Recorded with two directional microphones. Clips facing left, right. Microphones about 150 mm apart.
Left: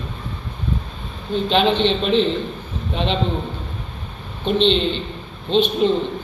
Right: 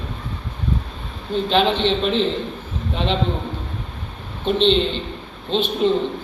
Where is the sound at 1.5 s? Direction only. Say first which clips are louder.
Left 1 dB; centre (ahead or behind).